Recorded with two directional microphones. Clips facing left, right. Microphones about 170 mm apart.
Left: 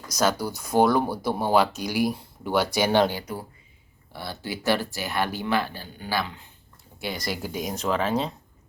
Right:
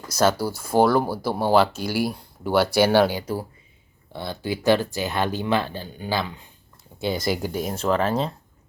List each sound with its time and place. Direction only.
0.1 s speech: 10° right (ahead or behind)
4.1 s speech: 20° right (ahead or behind)
7.2 s speech: centre (ahead or behind)